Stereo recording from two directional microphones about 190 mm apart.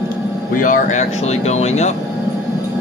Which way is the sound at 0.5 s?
45° left (ahead or behind).